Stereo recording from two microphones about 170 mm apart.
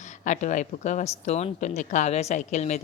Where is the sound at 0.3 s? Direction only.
45° left (ahead or behind).